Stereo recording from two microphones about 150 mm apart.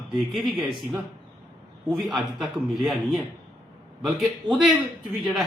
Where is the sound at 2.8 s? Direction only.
Centre (ahead or behind).